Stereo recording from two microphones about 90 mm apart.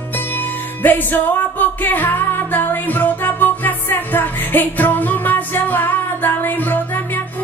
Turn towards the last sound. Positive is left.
turn(degrees=20)  # may be behind; listen again after turning